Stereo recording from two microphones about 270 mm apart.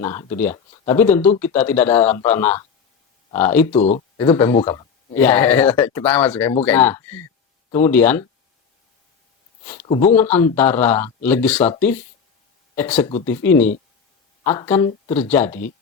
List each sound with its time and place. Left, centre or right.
0.0 s speech: centre
3.7 s speech: left
4.2 s speech: centre
4.5 s speech: centre
5.1 s speech: centre
9.8 s speech: left
10.3 s speech: centre
12.7 s speech: centre